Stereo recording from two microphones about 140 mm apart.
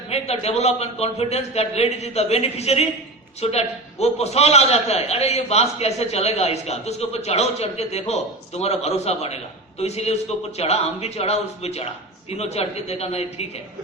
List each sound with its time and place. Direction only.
0.1 s a man's voice: 50° left (ahead or behind)